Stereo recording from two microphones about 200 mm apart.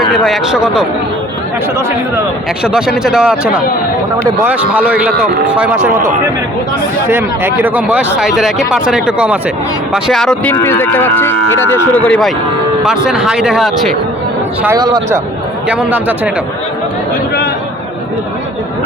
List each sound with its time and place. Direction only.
0.3 s speech: 5° right (ahead or behind)
2.6 s speech: 5° right (ahead or behind)
7.1 s speech: 10° right (ahead or behind)
14.8 s a man's voice: 20° right (ahead or behind)
15.7 s speech: 5° right (ahead or behind)